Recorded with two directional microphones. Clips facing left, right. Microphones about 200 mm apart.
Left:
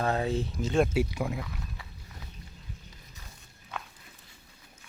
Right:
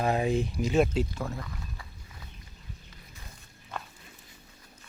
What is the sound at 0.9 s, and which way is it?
Speech, 10° left (ahead or behind).